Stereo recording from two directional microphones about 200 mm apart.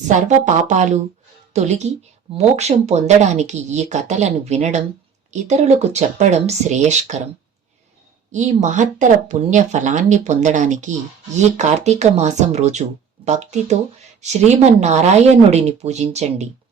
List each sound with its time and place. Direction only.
0.1 s speech: 35° right (ahead or behind)
8.3 s speech: 35° right (ahead or behind)